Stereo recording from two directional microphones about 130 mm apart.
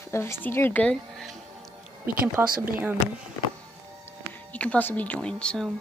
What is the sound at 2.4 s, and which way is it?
Speech, 20° right (ahead or behind).